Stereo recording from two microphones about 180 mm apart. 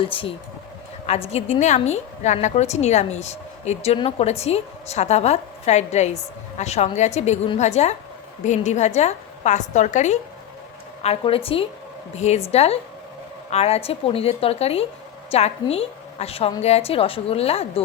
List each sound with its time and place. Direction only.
0.0 s a woman's voice: 30° left (ahead or behind)